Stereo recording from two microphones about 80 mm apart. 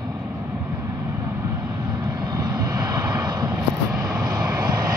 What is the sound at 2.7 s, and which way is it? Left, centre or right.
Vehicle, right.